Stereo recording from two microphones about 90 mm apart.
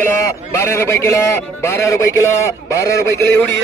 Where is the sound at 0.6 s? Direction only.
30° left (ahead or behind).